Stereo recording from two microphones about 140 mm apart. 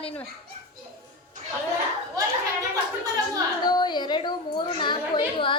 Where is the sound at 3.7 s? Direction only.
30° left (ahead or behind).